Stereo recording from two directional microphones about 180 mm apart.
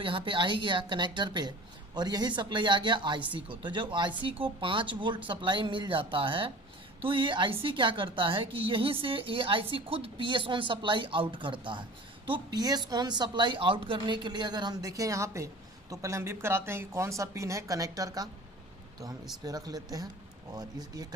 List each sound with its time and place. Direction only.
0.0 s a woman's voice: 30° right (ahead or behind)
19.5 s speech: 20° right (ahead or behind)